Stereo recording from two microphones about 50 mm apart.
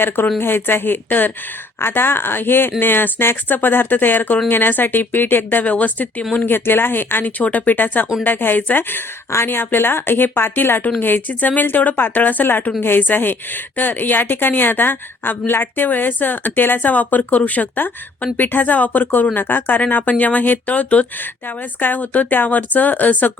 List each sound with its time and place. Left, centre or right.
0.3 s a woman's voice: left
5.6 s a woman's voice: left
6.3 s speech: left
7.3 s a woman's voice: left